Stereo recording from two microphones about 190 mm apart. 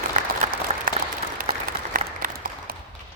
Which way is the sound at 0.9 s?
45° right (ahead or behind).